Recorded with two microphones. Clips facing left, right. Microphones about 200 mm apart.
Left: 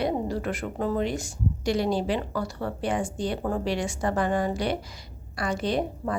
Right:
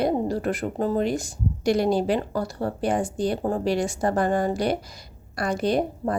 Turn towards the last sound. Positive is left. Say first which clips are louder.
# right 4 dB
turn(degrees=-45)  # may be behind; listen again after turning